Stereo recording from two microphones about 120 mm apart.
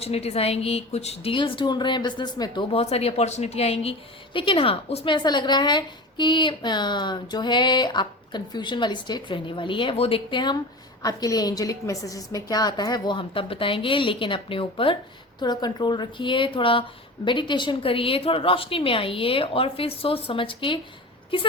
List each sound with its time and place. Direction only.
0.0 s a woman's voice: 60° left (ahead or behind)
1.3 s a woman's voice: 45° left (ahead or behind)
2.7 s a woman's voice: 55° left (ahead or behind)
4.4 s a woman's voice: 50° left (ahead or behind)
5.1 s a woman's voice: 40° left (ahead or behind)
15.4 s a woman's voice: 35° left (ahead or behind)